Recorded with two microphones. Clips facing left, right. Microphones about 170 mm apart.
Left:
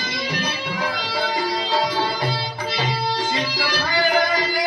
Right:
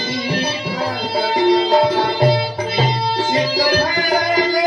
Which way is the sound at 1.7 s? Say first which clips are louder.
Right 7 dB; 45° right (ahead or behind).